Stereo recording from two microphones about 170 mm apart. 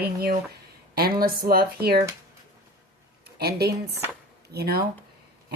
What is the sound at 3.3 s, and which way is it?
A woman's voice, 70° right (ahead or behind).